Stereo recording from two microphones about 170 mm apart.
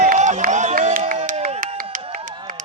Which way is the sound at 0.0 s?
50° right (ahead or behind).